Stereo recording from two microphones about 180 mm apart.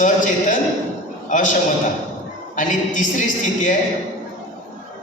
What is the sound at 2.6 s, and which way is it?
Speech, 45° left (ahead or behind).